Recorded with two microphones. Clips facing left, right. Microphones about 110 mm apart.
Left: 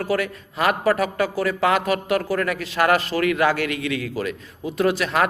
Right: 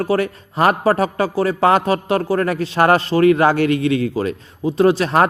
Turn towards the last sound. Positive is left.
turn(degrees=-35)  # may be behind; listen again after turning